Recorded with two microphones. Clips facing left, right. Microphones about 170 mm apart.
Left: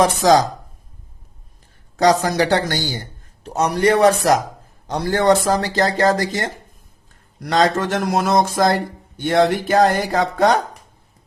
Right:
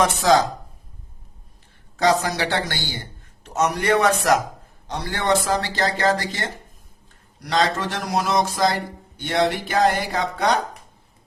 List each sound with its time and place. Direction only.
0.0 s a man's voice: 40° left (ahead or behind)
2.0 s a man's voice: 45° left (ahead or behind)